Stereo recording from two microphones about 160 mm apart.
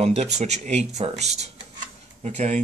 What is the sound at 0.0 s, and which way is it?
Speech, 40° right (ahead or behind).